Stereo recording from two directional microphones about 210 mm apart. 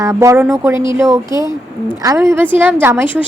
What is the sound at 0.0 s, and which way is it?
A woman's voice, 15° right (ahead or behind).